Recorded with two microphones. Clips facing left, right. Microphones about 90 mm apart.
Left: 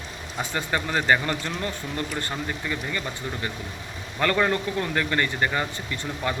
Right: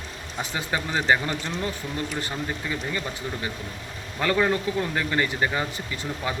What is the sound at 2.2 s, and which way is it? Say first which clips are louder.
Speech: even; 15° right (ahead or behind).